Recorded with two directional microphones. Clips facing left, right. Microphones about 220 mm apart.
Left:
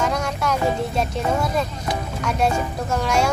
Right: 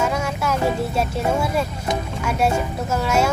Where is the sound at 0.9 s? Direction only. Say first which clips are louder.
Right 1 dB; 10° right (ahead or behind).